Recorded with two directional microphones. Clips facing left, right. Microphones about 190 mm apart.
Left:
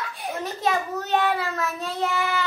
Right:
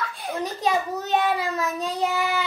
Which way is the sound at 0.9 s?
15° right (ahead or behind).